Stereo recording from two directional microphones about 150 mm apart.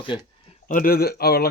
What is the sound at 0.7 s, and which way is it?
Speech, 75° left (ahead or behind).